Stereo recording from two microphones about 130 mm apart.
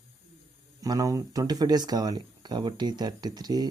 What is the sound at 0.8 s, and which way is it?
Speech, 30° right (ahead or behind).